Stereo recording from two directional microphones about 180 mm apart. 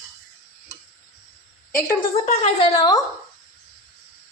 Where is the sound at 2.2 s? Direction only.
35° left (ahead or behind).